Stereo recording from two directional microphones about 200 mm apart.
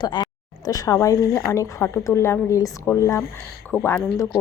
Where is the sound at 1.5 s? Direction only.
15° left (ahead or behind).